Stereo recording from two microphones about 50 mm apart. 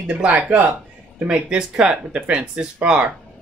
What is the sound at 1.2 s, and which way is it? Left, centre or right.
Speech, centre.